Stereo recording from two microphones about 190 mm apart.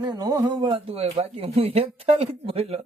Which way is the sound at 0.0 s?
20° right (ahead or behind).